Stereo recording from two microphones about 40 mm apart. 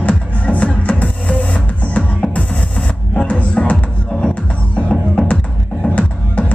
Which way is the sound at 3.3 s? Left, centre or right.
Left.